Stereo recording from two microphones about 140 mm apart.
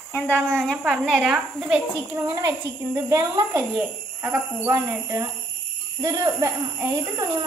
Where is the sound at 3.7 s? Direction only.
10° right (ahead or behind).